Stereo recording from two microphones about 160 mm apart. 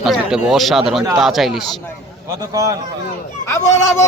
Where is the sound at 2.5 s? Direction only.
20° right (ahead or behind).